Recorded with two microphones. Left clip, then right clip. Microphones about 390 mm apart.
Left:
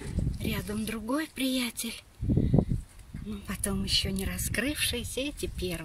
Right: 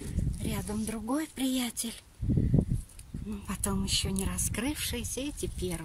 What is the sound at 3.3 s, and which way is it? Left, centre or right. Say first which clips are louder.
A woman's voice: even; centre.